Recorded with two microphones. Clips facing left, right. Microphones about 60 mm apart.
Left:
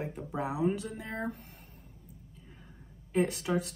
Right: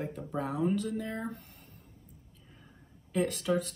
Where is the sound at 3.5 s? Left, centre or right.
Left.